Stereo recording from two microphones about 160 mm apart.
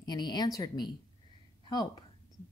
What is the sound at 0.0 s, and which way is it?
Speech, 25° left (ahead or behind).